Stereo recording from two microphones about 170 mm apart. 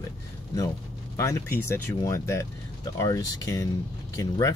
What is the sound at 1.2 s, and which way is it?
Speech, 15° left (ahead or behind).